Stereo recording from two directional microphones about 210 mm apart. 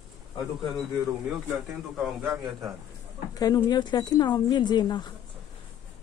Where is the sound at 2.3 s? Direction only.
10° right (ahead or behind).